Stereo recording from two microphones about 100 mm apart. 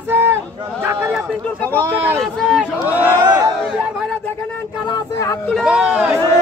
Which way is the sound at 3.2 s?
45° right (ahead or behind).